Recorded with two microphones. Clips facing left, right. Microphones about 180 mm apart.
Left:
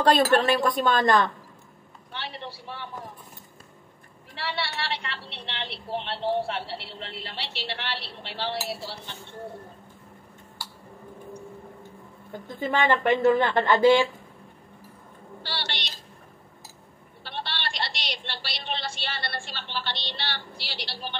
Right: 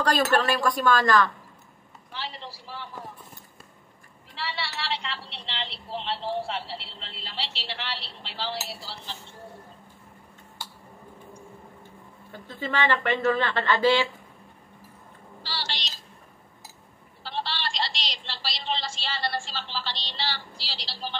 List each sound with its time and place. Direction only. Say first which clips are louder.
0.0 s speech: left 3 dB; 25° left (ahead or behind)
2.1 s a sound: left 1 dB; 60° left (ahead or behind)
4.4 s a woman's voice: left 2 dB; 60° left (ahead or behind)
13.2 s speech: left 4 dB; 15° left (ahead or behind)
15.4 s a sound: left 1 dB; 60° left (ahead or behind)
17.2 s a woman's voice: right 2 dB; 60° left (ahead or behind)